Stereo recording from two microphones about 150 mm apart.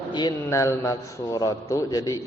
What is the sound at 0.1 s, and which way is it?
Speech, 30° left (ahead or behind).